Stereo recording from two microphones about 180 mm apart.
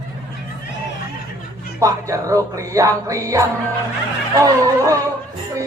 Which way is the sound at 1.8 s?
15° right (ahead or behind).